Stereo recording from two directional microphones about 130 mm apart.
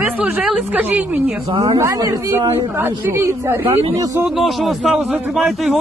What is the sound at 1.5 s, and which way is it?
Speech, 40° right (ahead or behind).